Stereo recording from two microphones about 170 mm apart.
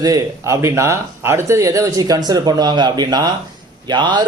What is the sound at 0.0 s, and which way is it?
A man's voice, 20° right (ahead or behind).